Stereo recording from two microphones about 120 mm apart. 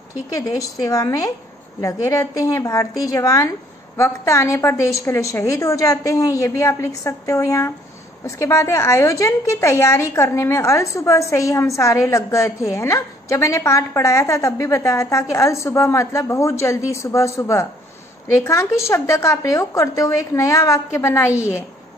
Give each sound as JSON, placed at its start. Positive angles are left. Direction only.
{"t": 0.4, "sound": "a woman's voice", "side_deg": 30}